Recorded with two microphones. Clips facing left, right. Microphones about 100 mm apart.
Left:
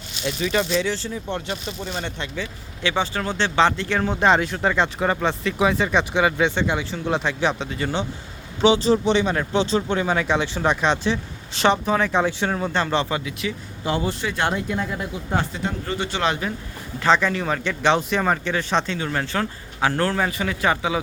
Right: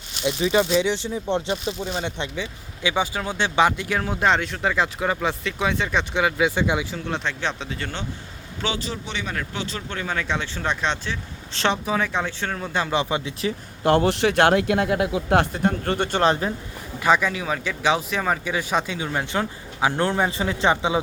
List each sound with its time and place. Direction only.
0.3 s speech: 15° right (ahead or behind)
1.6 s speech: 10° right (ahead or behind)
7.0 s speech: 5° left (ahead or behind)
8.6 s speech: 20° left (ahead or behind)
12.7 s speech: 10° right (ahead or behind)
13.8 s speech: 60° right (ahead or behind)
16.2 s speech: 35° right (ahead or behind)
17.0 s speech: 10° right (ahead or behind)